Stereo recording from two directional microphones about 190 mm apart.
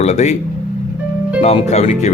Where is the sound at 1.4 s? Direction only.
35° left (ahead or behind).